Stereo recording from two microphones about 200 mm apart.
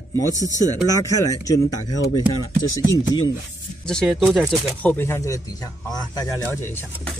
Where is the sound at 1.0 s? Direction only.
15° left (ahead or behind).